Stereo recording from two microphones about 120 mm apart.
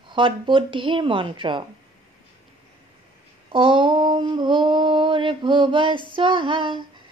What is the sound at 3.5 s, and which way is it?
A woman's voice, 45° right (ahead or behind).